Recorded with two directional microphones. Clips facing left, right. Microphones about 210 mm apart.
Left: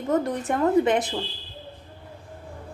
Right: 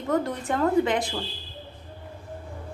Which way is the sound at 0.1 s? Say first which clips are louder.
Left 2 dB; 20° left (ahead or behind).